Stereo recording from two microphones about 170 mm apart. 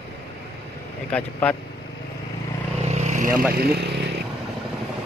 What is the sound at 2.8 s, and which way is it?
Vehicle, 40° right (ahead or behind).